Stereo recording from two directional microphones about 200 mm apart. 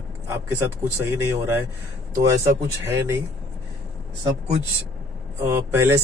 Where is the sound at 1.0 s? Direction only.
15° right (ahead or behind).